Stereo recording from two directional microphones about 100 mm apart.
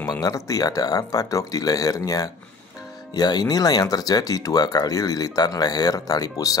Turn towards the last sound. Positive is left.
turn(degrees=35)  # may be behind; listen again after turning